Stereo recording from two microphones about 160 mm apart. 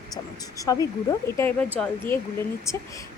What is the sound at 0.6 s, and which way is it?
Speech, 20° left (ahead or behind).